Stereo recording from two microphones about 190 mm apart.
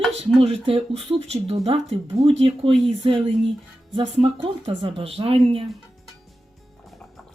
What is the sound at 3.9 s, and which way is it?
Speech, 30° right (ahead or behind).